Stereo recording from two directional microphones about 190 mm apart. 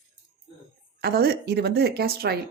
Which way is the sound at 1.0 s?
55° right (ahead or behind).